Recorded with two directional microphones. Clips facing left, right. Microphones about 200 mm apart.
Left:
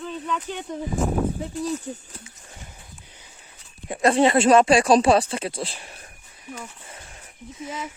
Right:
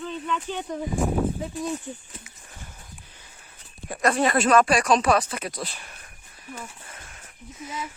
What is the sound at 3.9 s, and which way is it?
Speech, 25° left (ahead or behind).